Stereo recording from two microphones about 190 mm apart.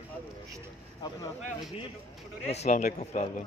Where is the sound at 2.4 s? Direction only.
35° left (ahead or behind).